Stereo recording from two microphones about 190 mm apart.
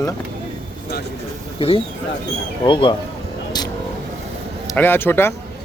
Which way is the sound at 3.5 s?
20° left (ahead or behind).